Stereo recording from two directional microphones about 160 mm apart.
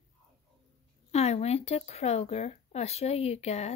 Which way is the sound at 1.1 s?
40° left (ahead or behind).